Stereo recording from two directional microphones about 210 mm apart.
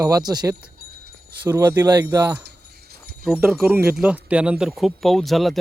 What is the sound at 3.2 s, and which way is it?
Speech, centre (ahead or behind).